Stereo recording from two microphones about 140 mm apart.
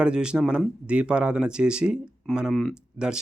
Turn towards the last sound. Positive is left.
turn(degrees=-5)  # may be behind; listen again after turning